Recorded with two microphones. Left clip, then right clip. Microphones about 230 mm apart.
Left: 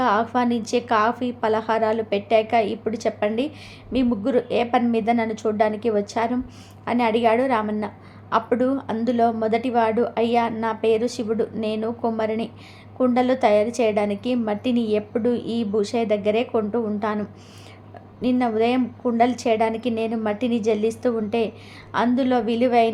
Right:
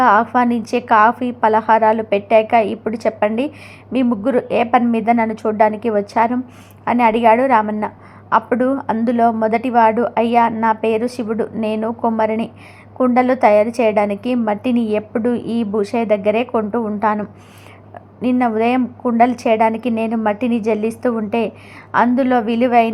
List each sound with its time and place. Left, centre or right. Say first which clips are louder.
0.0 s a woman's voice: right 8 dB; centre